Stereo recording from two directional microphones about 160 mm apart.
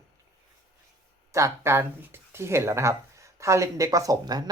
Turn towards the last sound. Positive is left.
turn(degrees=-25)  # may be behind; listen again after turning